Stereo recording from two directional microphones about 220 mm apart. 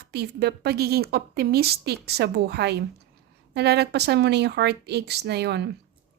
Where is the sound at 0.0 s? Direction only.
45° right (ahead or behind).